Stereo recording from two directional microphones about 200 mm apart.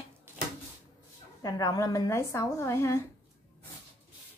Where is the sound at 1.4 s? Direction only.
15° left (ahead or behind).